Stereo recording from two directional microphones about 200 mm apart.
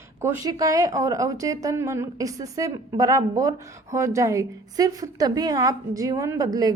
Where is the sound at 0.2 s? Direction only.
10° right (ahead or behind).